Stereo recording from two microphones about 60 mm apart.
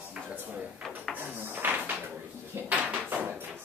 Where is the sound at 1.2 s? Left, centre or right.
Right.